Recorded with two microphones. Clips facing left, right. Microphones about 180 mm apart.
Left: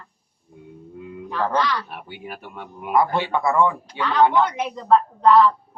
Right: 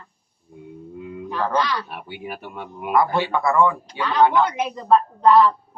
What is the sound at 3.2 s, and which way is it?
Speech, 20° left (ahead or behind).